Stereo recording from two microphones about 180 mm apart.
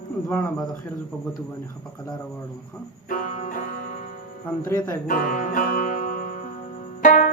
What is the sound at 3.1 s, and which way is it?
Music, 50° left (ahead or behind).